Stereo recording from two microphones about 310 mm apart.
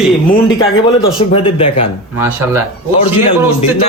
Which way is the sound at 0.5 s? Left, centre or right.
Centre.